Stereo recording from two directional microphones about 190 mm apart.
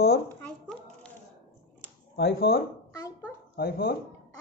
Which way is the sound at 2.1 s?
55° left (ahead or behind).